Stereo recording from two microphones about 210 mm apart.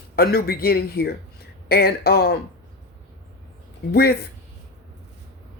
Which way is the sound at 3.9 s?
50° left (ahead or behind).